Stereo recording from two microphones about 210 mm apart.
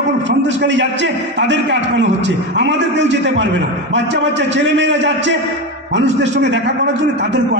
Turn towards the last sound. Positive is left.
turn(degrees=-55)  # may be behind; listen again after turning